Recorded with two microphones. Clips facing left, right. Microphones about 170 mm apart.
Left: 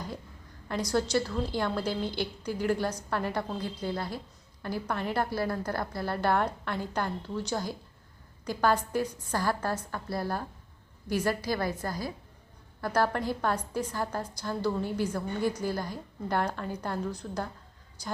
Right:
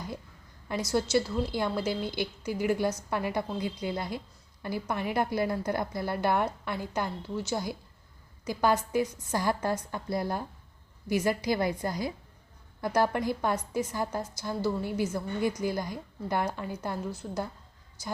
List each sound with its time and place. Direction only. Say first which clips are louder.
0.7 s a woman's voice: right 1 dB; 15° right (ahead or behind)